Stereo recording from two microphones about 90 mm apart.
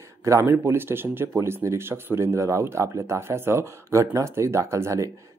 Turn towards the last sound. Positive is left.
turn(degrees=-35)  # may be behind; listen again after turning